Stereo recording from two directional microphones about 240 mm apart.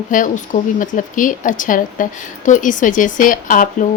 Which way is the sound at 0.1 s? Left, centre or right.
Left.